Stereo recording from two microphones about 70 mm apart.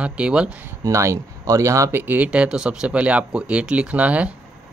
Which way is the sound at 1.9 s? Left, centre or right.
Right.